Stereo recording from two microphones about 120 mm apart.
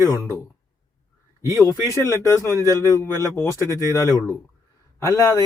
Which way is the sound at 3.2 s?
25° left (ahead or behind).